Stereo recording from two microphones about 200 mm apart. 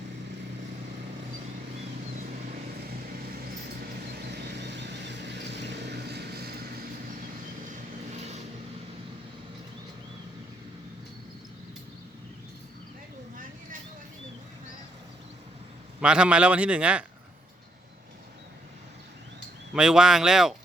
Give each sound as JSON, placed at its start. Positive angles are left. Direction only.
{"t": 4.1, "sound": "vehicle", "side_deg": -55}
{"t": 8.1, "sound": "vehicle", "side_deg": -35}
{"t": 16.0, "sound": "a man's voice", "side_deg": -5}
{"t": 19.7, "sound": "a man's voice", "side_deg": -5}